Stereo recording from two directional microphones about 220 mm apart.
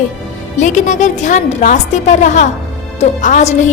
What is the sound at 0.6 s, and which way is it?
A woman's voice, 35° left (ahead or behind).